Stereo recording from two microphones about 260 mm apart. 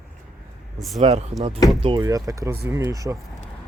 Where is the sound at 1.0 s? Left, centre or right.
Right.